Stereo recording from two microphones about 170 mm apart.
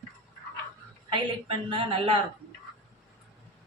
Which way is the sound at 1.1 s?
30° right (ahead or behind).